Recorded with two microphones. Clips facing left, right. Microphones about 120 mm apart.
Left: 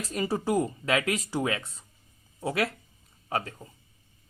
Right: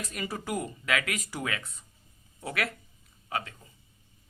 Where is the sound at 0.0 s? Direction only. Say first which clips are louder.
Left 7 dB; 30° left (ahead or behind).